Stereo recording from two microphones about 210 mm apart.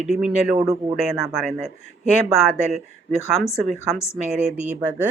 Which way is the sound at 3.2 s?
15° left (ahead or behind).